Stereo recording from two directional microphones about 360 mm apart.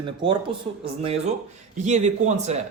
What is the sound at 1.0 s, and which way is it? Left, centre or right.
A man's voice, centre.